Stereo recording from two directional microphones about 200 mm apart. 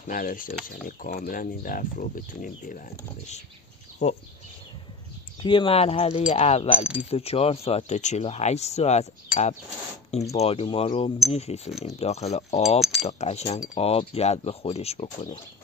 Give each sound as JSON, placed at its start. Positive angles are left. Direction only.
{"t": 0.0, "sound": "speech", "side_deg": 45}
{"t": 5.4, "sound": "speech", "side_deg": 25}
{"t": 6.8, "sound": "speech", "side_deg": -5}
{"t": 7.1, "sound": "speech", "side_deg": 30}